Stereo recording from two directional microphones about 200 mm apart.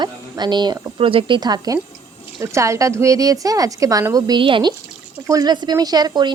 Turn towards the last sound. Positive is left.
turn(degrees=-20)  # may be behind; listen again after turning